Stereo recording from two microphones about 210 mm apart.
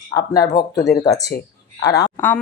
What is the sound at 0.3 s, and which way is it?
Speech, 15° left (ahead or behind).